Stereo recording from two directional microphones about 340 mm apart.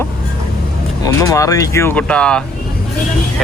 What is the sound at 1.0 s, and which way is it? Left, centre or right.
Speech, centre.